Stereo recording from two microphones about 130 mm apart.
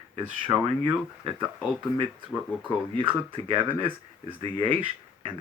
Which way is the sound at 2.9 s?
40° right (ahead or behind).